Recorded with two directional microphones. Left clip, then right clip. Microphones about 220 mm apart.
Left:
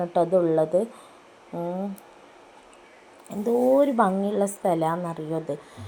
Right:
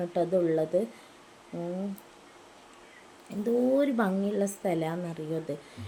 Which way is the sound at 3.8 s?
5° right (ahead or behind).